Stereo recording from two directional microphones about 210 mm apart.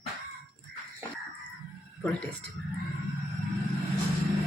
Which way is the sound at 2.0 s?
5° left (ahead or behind).